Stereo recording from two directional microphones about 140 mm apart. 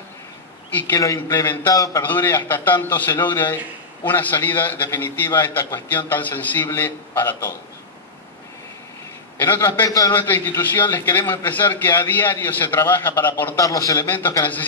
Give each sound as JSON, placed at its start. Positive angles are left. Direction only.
{"t": 0.7, "sound": "a man's voice", "side_deg": 20}
{"t": 9.4, "sound": "a man's voice", "side_deg": 15}
{"t": 10.1, "sound": "a man's voice", "side_deg": 15}
{"t": 13.6, "sound": "a man's voice", "side_deg": 25}